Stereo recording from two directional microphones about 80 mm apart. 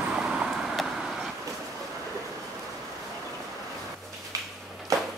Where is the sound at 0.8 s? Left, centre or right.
Centre.